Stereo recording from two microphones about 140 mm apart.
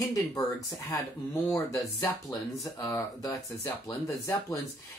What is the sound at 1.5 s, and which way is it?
Speech, 25° left (ahead or behind).